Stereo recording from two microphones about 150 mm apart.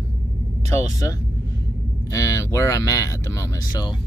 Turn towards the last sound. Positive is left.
turn(degrees=25)  # may be behind; listen again after turning